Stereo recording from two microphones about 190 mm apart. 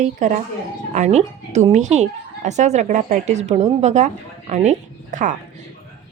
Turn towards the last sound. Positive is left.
turn(degrees=-40)  # may be behind; listen again after turning